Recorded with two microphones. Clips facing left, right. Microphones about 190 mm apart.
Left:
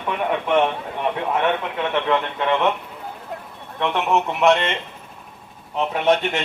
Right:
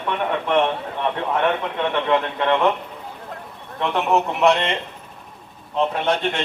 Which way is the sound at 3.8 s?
Centre (ahead or behind).